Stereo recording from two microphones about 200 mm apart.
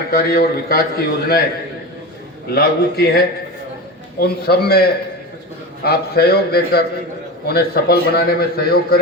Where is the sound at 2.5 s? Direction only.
50° left (ahead or behind).